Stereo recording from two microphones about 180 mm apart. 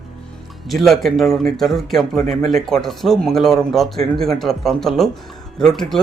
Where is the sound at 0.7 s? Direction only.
Centre (ahead or behind).